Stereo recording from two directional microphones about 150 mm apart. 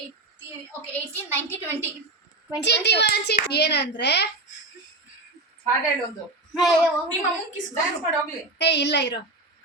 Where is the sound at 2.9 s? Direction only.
90° left.